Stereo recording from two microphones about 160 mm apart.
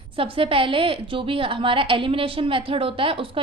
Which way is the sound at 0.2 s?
35° right (ahead or behind).